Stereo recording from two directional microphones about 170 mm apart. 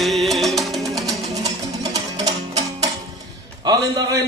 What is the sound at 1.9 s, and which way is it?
Music, 20° right (ahead or behind).